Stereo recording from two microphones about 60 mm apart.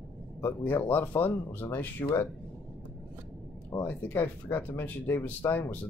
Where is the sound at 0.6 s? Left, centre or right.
Left.